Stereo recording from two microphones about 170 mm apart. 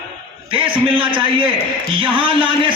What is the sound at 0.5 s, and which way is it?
A man's voice, 30° right (ahead or behind).